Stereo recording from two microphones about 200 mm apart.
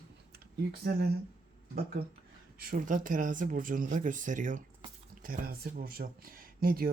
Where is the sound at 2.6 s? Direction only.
45° right (ahead or behind).